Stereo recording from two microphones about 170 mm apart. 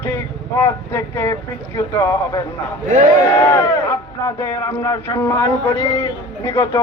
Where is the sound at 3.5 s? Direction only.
15° left (ahead or behind).